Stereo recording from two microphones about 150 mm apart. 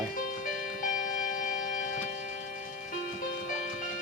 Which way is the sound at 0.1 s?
65° left (ahead or behind).